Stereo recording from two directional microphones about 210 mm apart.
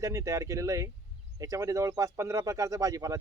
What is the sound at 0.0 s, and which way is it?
Speech, 15° right (ahead or behind).